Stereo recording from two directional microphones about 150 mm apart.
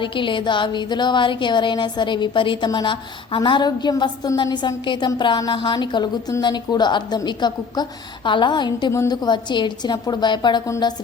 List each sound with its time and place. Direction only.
0.0 s a woman's voice: 35° left (ahead or behind)